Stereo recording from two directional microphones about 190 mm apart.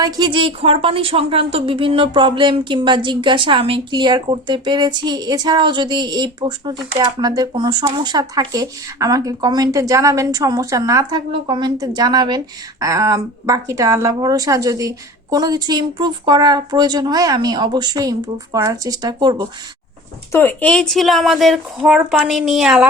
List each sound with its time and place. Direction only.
0.0 s a woman's voice: 25° right (ahead or behind)
20.3 s speech: 10° left (ahead or behind)